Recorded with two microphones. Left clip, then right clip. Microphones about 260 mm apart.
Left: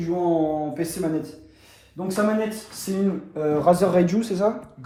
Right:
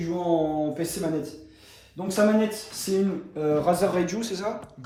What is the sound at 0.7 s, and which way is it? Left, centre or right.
Speech, centre.